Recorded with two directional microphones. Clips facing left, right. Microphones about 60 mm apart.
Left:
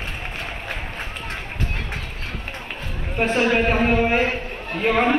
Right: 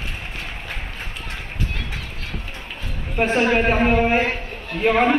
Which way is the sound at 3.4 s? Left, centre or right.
Right.